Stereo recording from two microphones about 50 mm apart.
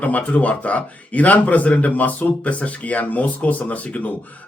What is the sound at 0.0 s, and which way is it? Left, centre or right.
Speech, left.